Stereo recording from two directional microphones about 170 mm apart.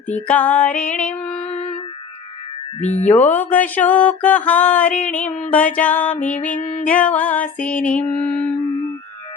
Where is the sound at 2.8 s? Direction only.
40° left (ahead or behind).